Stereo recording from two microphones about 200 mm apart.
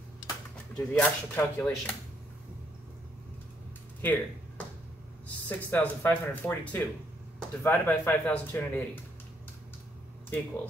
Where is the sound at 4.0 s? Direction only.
5° left (ahead or behind).